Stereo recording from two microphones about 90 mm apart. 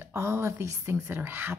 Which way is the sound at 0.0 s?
30° right (ahead or behind).